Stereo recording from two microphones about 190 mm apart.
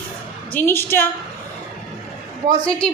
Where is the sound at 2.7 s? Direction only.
5° left (ahead or behind).